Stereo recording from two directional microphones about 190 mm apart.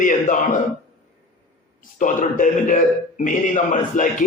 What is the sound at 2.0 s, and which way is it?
Music, 45° left (ahead or behind).